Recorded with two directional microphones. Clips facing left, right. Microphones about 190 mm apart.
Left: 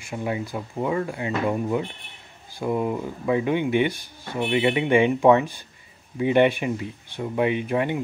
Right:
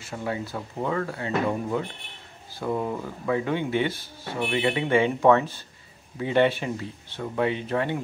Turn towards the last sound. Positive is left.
turn(degrees=15)  # may be behind; listen again after turning